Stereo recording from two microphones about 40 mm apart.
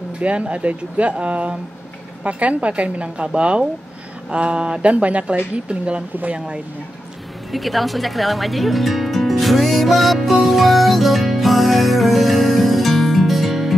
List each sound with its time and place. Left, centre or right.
0.2 s a woman's voice: right
7.5 s music: centre